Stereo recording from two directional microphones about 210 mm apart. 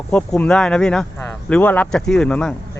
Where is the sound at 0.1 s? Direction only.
5° left (ahead or behind).